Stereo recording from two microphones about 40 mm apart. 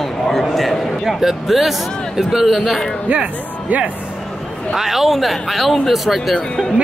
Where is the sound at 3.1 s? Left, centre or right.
Right.